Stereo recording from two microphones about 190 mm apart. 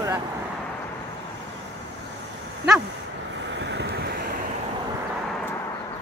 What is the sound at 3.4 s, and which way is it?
Vehicle, 70° right (ahead or behind).